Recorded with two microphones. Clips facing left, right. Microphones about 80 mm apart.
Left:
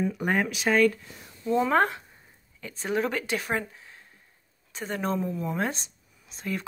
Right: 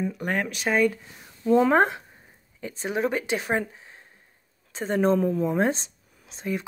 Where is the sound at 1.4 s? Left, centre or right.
Right.